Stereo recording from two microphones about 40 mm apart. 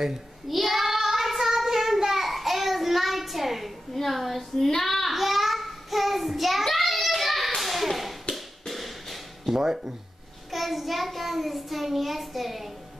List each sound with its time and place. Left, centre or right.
0.5 s child singing: centre
8.6 s a sound: centre
9.6 s speech: centre
10.5 s child singing: centre